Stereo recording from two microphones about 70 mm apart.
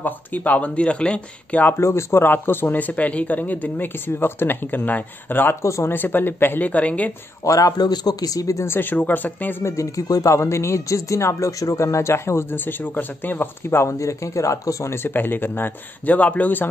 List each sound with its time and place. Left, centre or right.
0.0 s speech: left
1.7 s speech: left
5.6 s speech: left
5.9 s speech: left
7.4 s a man's voice: left
8.6 s speech: left
9.6 s speech: left
13.8 s speech: left
15.0 s speech: left